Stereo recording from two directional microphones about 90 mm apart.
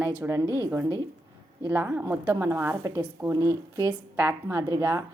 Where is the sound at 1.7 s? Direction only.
25° right (ahead or behind).